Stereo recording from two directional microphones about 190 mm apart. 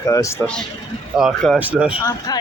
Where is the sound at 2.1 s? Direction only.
20° left (ahead or behind).